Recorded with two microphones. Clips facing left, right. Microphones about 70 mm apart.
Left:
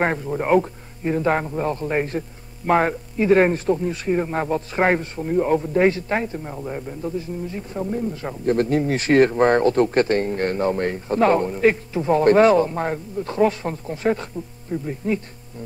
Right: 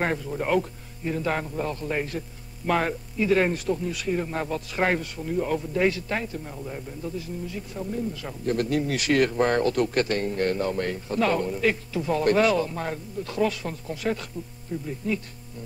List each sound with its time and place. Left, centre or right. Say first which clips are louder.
0.0 s speech: left 5 dB; left